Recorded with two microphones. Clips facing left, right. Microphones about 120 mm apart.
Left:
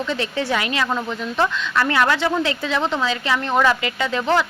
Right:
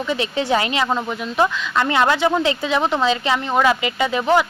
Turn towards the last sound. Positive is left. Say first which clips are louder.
# right 3 dB
turn(degrees=-15)  # may be behind; listen again after turning